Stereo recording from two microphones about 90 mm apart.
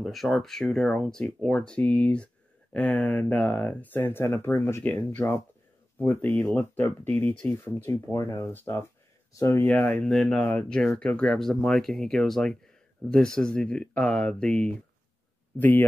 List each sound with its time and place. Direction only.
0.0 s speech: centre (ahead or behind); by 4.8 s 30° left (ahead or behind)
5.9 s speech: 20° left (ahead or behind); by 9.7 s 35° left (ahead or behind)
9.7 s speech: 15° left (ahead or behind)